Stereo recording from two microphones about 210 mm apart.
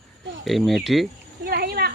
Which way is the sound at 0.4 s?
Centre (ahead or behind).